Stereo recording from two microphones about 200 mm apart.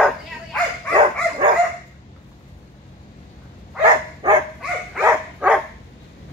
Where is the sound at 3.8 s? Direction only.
25° right (ahead or behind).